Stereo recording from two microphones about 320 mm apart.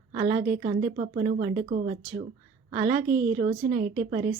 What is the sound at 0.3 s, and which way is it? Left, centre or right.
Speech, right.